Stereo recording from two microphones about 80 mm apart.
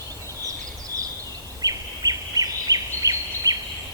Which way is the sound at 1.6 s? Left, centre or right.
Right.